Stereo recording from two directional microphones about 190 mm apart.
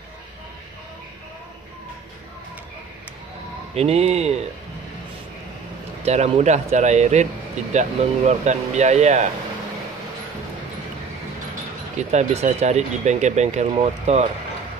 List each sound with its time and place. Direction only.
3.7 s speech: 30° right (ahead or behind)
6.0 s speech: 35° right (ahead or behind)
12.0 s speech: 35° right (ahead or behind)